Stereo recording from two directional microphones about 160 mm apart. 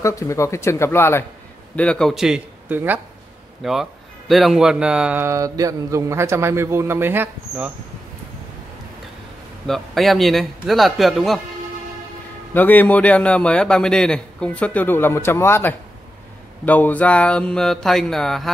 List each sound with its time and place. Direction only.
0.0 s a man's voice: 20° left (ahead or behind)
1.8 s mantra: 5° left (ahead or behind); by 3.0 s 10° right (ahead or behind)
3.6 s mantra: centre (ahead or behind)
4.3 s a man's voice: centre (ahead or behind)
9.7 s mantra: centre (ahead or behind)
12.5 s a man's voice: 10° left (ahead or behind)
16.6 s mantra: 10° left (ahead or behind)